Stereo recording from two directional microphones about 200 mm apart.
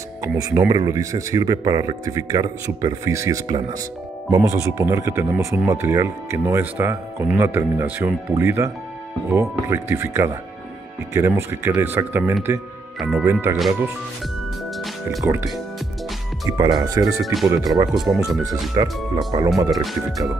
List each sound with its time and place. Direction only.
0.2 s a man's voice: 15° right (ahead or behind)
13.6 s speech: centre (ahead or behind)
16.4 s a man's voice: 20° right (ahead or behind)
17.2 s speech: centre (ahead or behind)
18.2 s a man's voice: 20° right (ahead or behind)
19.8 s speech: centre (ahead or behind)